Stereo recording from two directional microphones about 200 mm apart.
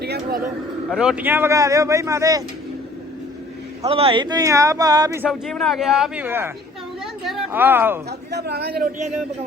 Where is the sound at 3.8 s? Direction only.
30° right (ahead or behind).